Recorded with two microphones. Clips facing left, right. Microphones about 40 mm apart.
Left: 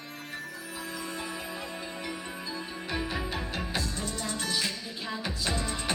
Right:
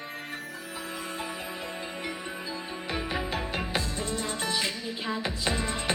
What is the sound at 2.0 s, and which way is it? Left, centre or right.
Music, right.